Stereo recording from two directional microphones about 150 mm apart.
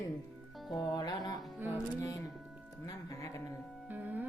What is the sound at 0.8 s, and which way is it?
Music, 25° left (ahead or behind).